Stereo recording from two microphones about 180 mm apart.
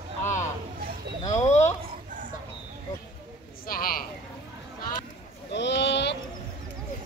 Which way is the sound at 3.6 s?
55° left (ahead or behind).